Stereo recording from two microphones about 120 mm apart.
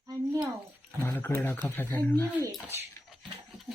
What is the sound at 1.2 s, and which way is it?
Speech, 15° left (ahead or behind).